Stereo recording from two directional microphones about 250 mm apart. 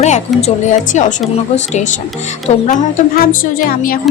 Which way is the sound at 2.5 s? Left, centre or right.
Left.